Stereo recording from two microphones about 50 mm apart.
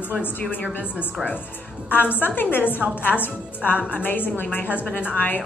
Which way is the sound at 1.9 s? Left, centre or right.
Left.